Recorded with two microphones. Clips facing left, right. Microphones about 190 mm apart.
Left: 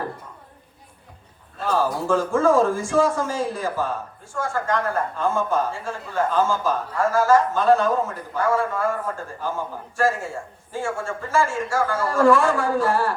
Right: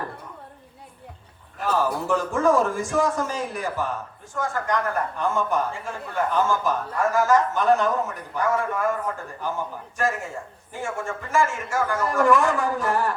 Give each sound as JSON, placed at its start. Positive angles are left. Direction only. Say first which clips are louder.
{"t": 2.0, "sound": "a man's voice", "louder": "left 3 dB", "side_deg": -20}